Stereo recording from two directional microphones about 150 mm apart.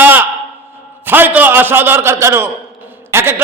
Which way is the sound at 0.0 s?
15° right (ahead or behind).